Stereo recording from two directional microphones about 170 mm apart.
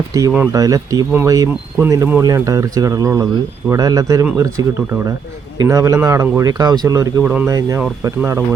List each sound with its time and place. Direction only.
0.1 s speech: 15° right (ahead or behind)
5.5 s speech: 20° right (ahead or behind)